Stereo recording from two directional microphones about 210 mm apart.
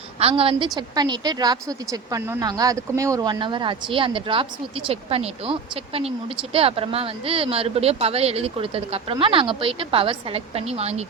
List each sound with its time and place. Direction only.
0.2 s speech: 25° right (ahead or behind)